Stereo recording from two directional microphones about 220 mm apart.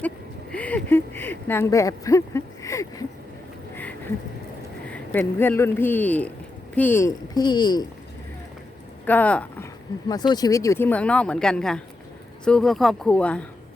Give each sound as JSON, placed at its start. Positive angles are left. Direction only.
{"t": 0.5, "sound": "speech", "side_deg": 5}
{"t": 4.9, "sound": "speech", "side_deg": 10}
{"t": 9.0, "sound": "speech", "side_deg": 5}
{"t": 10.1, "sound": "speech", "side_deg": 20}